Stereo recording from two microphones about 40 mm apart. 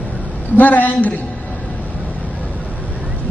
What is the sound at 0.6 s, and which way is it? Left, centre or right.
Speech, left.